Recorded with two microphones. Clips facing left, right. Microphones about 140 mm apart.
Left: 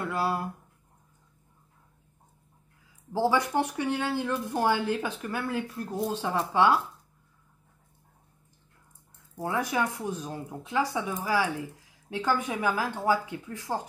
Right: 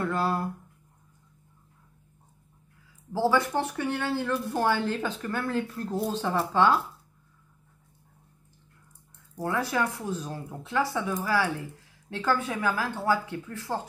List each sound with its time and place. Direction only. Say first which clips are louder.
0.0 s speech: right 2 dB; 10° left (ahead or behind)
3.1 s speech: right 1 dB; 15° left (ahead or behind)
9.4 s speech: right 1 dB; 20° left (ahead or behind)